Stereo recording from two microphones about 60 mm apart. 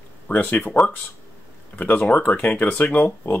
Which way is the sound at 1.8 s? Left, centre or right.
Left.